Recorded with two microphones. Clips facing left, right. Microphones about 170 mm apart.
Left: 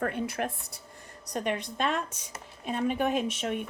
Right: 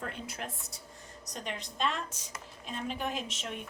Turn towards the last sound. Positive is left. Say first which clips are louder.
# left 9 dB
turn(degrees=55)  # may be behind; listen again after turning